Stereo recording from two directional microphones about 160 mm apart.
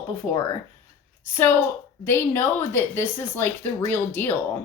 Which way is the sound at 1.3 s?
15° left (ahead or behind).